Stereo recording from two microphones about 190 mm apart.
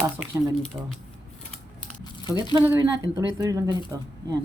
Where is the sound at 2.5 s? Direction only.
15° right (ahead or behind).